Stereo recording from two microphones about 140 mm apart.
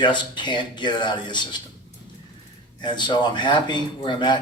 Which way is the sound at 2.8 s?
35° left (ahead or behind).